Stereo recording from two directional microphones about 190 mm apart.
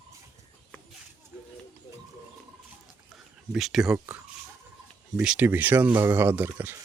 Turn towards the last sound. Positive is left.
turn(degrees=-10)  # may be behind; listen again after turning